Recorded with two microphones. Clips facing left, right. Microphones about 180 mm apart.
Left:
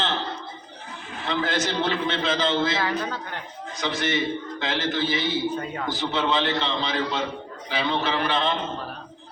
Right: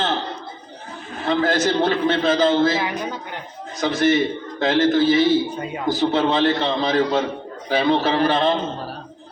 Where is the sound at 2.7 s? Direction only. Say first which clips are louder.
Right 2 dB; 15° right (ahead or behind).